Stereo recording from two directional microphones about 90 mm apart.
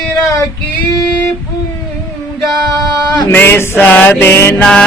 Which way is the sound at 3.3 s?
25° left (ahead or behind).